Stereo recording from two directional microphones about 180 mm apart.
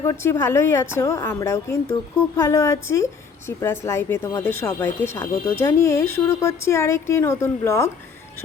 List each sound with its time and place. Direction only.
0.0 s speech: 15° left (ahead or behind)